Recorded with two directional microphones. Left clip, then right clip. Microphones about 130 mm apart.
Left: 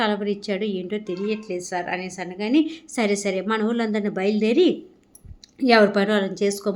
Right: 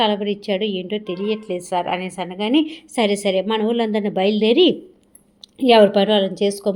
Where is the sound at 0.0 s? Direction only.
10° right (ahead or behind).